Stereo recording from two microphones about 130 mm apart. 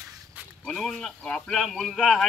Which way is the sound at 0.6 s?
5° left (ahead or behind).